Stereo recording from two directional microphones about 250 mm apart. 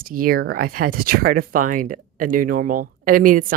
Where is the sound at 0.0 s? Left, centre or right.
Right.